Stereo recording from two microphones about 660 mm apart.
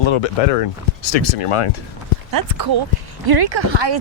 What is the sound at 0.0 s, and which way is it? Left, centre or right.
Speech, left.